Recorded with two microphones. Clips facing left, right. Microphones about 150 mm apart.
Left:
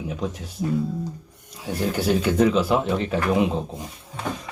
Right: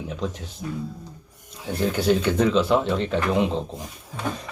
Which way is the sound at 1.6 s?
5° left (ahead or behind).